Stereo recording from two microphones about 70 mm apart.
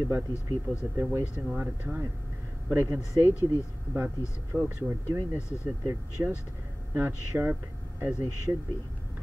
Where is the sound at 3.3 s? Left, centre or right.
Left.